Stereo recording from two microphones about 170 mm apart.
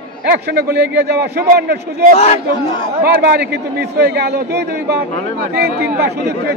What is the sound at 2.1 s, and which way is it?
Speech, 35° left (ahead or behind).